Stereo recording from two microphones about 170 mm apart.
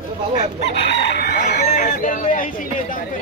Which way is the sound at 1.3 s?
45° left (ahead or behind).